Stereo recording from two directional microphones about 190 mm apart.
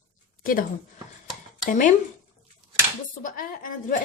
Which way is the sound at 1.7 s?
45° left (ahead or behind).